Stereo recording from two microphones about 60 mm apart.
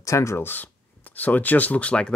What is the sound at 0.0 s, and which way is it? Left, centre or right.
Speech, left.